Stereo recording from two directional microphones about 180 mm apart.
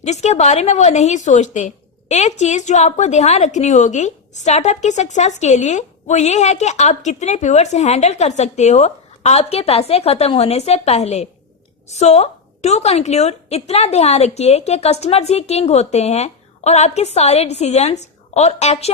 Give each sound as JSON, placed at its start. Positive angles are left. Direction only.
{"t": 0.0, "sound": "a woman's voice", "side_deg": 40}